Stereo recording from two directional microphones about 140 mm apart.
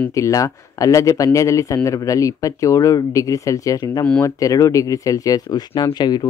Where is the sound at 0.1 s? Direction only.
25° left (ahead or behind).